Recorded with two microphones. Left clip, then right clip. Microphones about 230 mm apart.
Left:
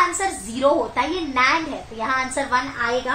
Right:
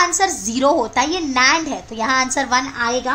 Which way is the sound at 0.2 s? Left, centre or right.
Right.